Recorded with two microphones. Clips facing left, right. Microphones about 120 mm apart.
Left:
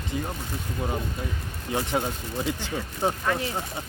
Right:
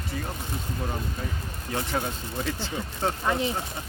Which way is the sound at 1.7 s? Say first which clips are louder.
Left 2 dB; 20° left (ahead or behind).